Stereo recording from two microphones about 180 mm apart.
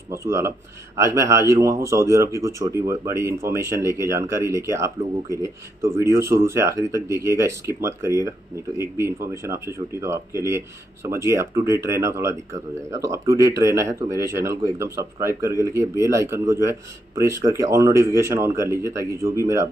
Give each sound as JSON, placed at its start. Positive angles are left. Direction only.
{"t": 0.1, "sound": "speech", "side_deg": -15}